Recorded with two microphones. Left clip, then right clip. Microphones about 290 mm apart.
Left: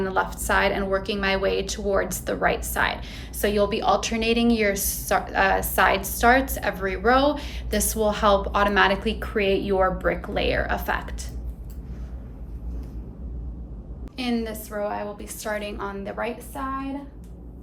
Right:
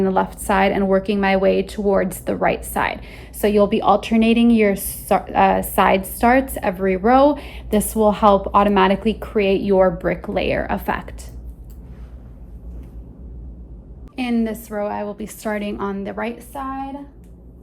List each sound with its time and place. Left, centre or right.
0.0 s a woman's voice: right
14.2 s a woman's voice: centre